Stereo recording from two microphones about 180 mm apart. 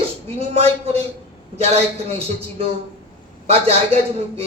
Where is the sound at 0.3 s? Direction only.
35° right (ahead or behind).